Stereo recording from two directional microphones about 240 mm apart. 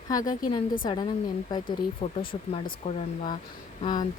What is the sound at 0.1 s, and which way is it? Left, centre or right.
A woman's voice, centre.